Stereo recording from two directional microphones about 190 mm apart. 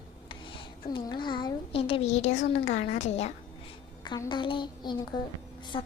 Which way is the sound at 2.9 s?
35° left (ahead or behind).